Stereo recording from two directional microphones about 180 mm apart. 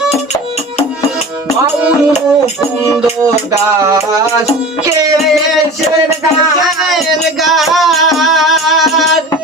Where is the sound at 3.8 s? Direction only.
20° right (ahead or behind).